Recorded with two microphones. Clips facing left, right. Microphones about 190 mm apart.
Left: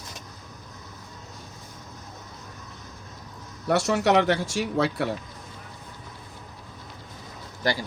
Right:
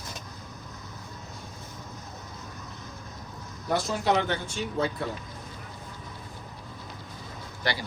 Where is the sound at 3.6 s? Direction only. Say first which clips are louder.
Left 4 dB; 75° left (ahead or behind).